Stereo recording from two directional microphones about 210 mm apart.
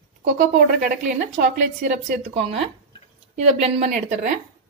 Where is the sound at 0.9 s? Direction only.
35° right (ahead or behind).